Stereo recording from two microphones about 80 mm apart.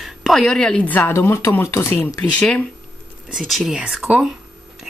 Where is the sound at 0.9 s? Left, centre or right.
Left.